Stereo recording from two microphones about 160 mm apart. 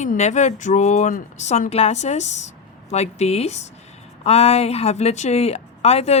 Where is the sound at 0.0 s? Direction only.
50° left (ahead or behind).